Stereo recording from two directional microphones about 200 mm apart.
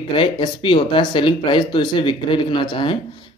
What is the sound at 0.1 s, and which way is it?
Speech, 25° left (ahead or behind).